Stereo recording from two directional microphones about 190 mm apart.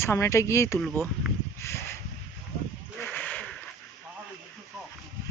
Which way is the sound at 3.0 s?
10° left (ahead or behind).